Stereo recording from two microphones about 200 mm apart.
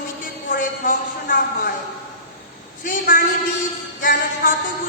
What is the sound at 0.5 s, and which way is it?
A man's voice, 45° left (ahead or behind).